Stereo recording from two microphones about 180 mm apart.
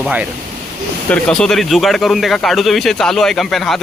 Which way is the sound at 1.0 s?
5° left (ahead or behind).